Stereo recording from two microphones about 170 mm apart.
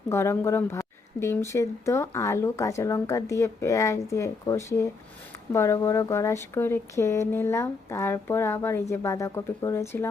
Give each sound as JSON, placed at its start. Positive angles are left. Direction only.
{"t": 0.1, "sound": "speech", "side_deg": 15}